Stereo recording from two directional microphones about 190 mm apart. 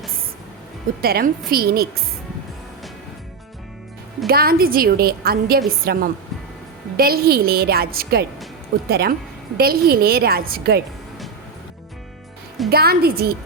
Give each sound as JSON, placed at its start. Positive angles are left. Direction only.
{"t": 1.0, "sound": "a woman's voice", "side_deg": -50}
{"t": 4.3, "sound": "a woman's voice", "side_deg": -55}
{"t": 12.7, "sound": "a woman's voice", "side_deg": -55}